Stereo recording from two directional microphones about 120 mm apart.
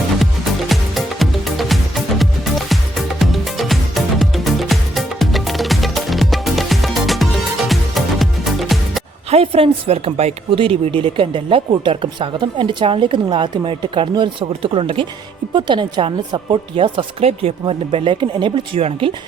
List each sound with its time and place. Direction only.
0.7 s music: centre (ahead or behind)
9.3 s a woman's voice: 50° right (ahead or behind)
17.2 s a woman's voice: 55° right (ahead or behind)